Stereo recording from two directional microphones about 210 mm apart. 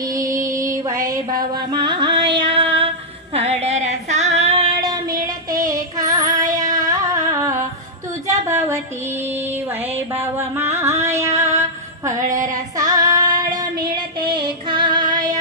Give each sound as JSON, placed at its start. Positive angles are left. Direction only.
{"t": 0.5, "sound": "music", "side_deg": -15}
{"t": 3.3, "sound": "a sound", "side_deg": -30}
{"t": 5.2, "sound": "music", "side_deg": -15}
{"t": 8.3, "sound": "a sound", "side_deg": -15}
{"t": 9.9, "sound": "music", "side_deg": -10}
{"t": 12.4, "sound": "female singing", "side_deg": -15}
{"t": 14.7, "sound": "female singing", "side_deg": -20}